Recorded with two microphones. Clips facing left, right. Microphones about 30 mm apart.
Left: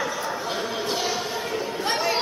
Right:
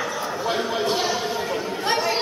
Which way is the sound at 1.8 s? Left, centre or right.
Centre.